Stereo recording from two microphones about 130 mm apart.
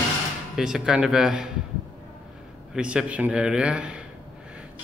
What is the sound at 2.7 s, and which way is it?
A man's voice, 5° right (ahead or behind).